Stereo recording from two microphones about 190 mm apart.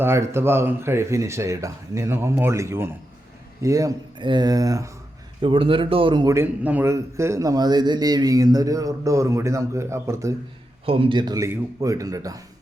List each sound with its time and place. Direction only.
0.0 s a man's voice: 15° right (ahead or behind)
10.8 s a man's voice: 30° right (ahead or behind)